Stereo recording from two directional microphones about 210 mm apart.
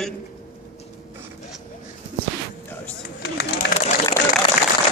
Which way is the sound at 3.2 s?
55° left (ahead or behind).